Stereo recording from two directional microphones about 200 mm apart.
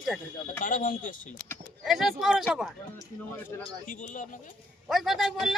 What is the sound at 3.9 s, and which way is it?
Speech, 40° left (ahead or behind).